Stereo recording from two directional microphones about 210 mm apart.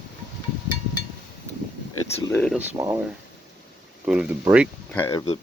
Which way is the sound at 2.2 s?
15° left (ahead or behind).